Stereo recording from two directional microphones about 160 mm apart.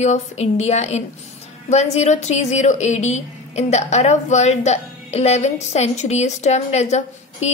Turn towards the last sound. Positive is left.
turn(degrees=45)  # may be behind; listen again after turning